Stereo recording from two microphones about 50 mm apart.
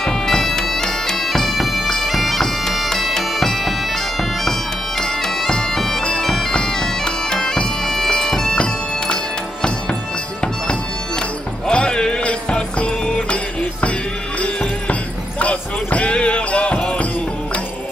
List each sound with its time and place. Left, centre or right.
0.0 s bagpipes: centre
7.8 s music: centre
11.6 s music: centre
14.4 s basketball bounce: left